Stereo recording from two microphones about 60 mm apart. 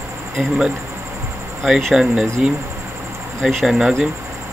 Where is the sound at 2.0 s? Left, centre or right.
Centre.